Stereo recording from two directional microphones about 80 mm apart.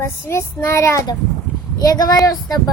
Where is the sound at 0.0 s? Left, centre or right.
Left.